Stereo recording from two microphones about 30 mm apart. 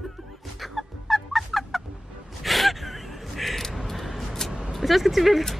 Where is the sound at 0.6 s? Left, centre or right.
Centre.